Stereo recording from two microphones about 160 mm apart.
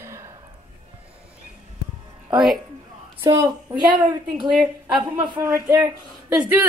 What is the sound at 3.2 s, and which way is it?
Speech, 20° right (ahead or behind).